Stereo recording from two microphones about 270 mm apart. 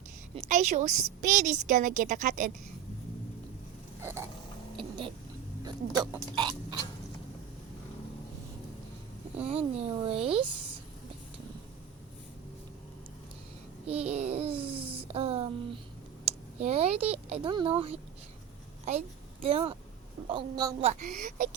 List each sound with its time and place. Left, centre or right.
0.3 s a woman's voice: right
4.8 s a sound: centre
5.6 s speech: centre
9.5 s a woman's voice: right
13.8 s a child's voice: right
21.0 s a woman's voice: right